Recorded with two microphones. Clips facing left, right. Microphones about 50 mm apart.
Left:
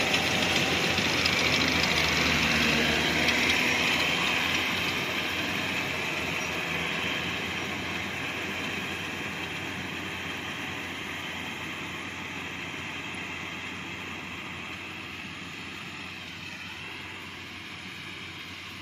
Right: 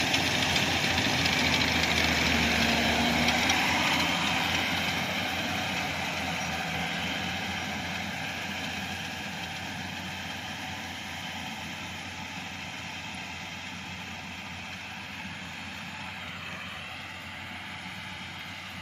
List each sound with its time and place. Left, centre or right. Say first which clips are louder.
0.0 s vehicle: left 1 dB; centre
2.8 s vehicle: even; left
3.3 s vehicle: left 1 dB; centre; by 9.8 s left